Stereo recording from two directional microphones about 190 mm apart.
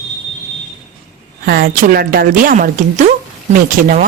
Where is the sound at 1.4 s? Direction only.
55° right (ahead or behind).